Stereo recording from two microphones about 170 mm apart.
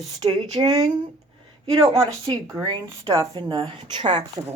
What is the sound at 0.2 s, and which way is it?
Speech, 35° right (ahead or behind).